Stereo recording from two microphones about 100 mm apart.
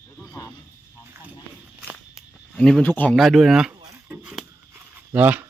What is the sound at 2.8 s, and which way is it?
Cattle, 15° left (ahead or behind).